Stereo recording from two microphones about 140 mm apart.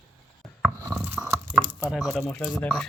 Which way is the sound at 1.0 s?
15° right (ahead or behind).